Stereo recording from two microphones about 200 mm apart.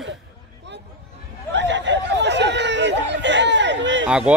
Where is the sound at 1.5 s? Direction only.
65° right (ahead or behind).